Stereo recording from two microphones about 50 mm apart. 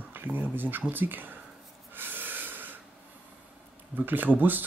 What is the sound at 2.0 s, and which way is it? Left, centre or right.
Snort, right.